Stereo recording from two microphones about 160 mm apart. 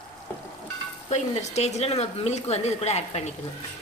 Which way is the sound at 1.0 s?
45° left (ahead or behind).